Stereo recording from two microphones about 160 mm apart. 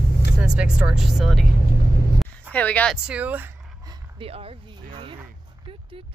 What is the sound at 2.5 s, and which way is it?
Speech, 10° left (ahead or behind).